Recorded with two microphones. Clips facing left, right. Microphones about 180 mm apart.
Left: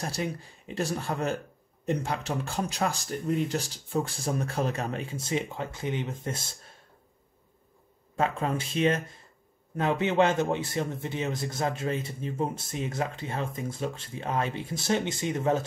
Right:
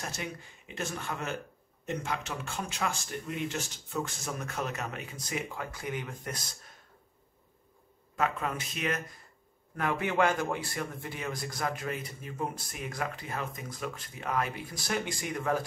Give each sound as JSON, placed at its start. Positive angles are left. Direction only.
{"t": 0.0, "sound": "speech", "side_deg": 35}
{"t": 8.2, "sound": "a man's voice", "side_deg": 30}